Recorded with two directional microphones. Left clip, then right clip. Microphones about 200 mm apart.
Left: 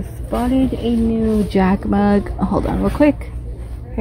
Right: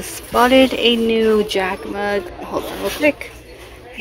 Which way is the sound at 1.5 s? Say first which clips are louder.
Left 3 dB; 15° left (ahead or behind).